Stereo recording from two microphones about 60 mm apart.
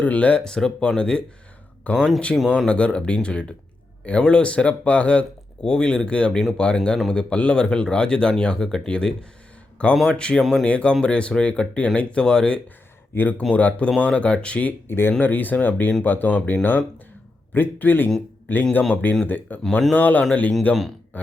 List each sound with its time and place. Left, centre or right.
0.0 s speech: left; by 2.5 s centre
2.6 s speech: centre
13.1 s speech: left
14.8 s speech: left